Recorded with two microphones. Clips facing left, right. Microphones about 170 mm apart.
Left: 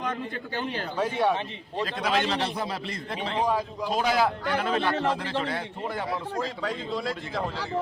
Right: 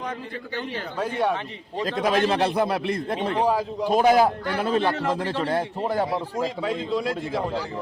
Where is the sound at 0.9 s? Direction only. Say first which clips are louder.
Right 1 dB; 10° left (ahead or behind).